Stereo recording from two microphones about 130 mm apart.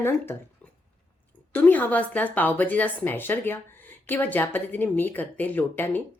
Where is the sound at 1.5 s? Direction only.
10° left (ahead or behind).